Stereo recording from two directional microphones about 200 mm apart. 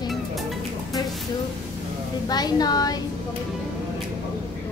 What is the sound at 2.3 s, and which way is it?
Speech, 20° left (ahead or behind).